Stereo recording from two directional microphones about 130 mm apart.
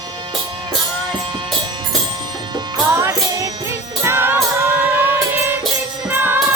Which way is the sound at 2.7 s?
25° right (ahead or behind).